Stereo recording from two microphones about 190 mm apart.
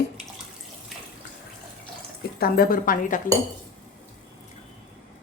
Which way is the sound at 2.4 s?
50° left (ahead or behind).